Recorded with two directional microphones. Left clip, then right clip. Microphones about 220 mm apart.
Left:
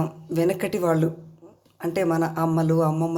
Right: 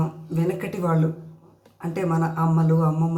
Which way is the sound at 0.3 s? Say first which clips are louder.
Left 4 dB; 50° left (ahead or behind).